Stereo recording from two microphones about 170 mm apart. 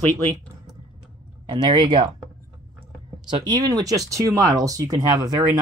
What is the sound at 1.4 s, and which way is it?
Speech, 25° right (ahead or behind).